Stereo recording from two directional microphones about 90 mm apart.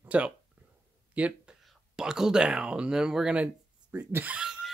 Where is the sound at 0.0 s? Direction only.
15° right (ahead or behind).